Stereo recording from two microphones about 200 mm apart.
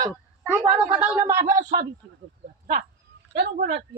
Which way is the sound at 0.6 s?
25° right (ahead or behind).